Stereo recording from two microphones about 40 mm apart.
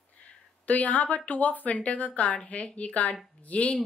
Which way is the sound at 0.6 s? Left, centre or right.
Left.